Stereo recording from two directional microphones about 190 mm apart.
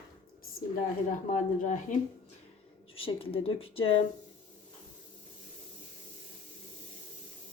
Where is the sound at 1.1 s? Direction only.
45° left (ahead or behind).